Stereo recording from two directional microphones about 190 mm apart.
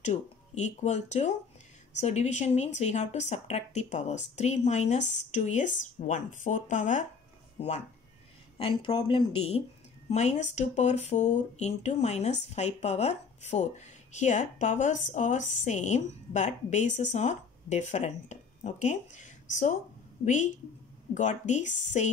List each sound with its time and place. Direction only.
0.0 s speech: 35° left (ahead or behind)
21.1 s speech: 40° left (ahead or behind)